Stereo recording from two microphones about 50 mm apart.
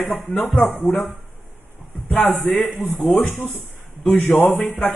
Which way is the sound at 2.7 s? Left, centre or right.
Centre.